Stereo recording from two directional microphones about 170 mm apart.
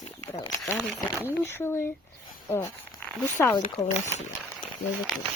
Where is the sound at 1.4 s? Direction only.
15° left (ahead or behind).